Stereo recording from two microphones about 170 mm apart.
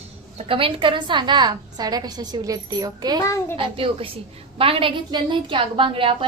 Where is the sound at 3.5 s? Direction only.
30° right (ahead or behind).